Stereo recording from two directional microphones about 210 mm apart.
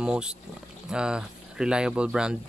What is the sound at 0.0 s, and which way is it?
Speech, 5° right (ahead or behind).